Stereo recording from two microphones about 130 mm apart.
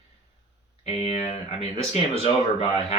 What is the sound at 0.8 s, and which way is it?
Speech, 50° left (ahead or behind).